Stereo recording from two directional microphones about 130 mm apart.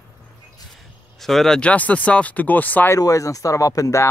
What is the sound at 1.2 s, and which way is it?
Speech, centre (ahead or behind).